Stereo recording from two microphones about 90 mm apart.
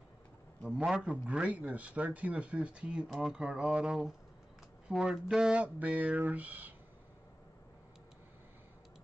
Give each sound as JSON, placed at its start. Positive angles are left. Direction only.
{"t": 0.7, "sound": "a man's voice", "side_deg": -10}